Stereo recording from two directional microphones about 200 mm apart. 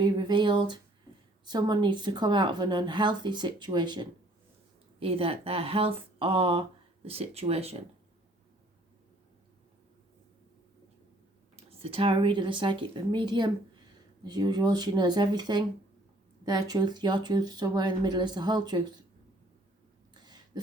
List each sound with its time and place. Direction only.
0.0 s speech: 20° right (ahead or behind)
11.5 s speech: 30° right (ahead or behind)
20.1 s a sound: 20° right (ahead or behind)